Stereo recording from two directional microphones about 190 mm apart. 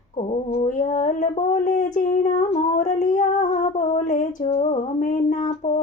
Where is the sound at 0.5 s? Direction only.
35° left (ahead or behind).